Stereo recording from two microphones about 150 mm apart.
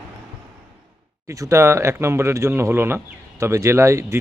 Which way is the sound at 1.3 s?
20° right (ahead or behind).